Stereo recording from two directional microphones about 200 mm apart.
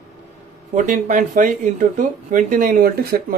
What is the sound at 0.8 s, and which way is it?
Speech, 40° right (ahead or behind).